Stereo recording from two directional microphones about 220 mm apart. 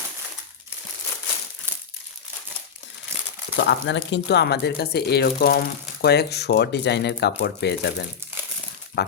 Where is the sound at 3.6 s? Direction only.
55° left (ahead or behind).